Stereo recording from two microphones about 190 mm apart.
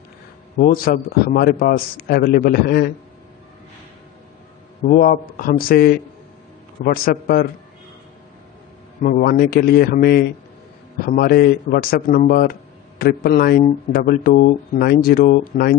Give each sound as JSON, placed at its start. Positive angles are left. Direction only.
{"t": 0.6, "sound": "speech", "side_deg": 50}
{"t": 4.8, "sound": "speech", "side_deg": 50}
{"t": 9.0, "sound": "speech", "side_deg": 50}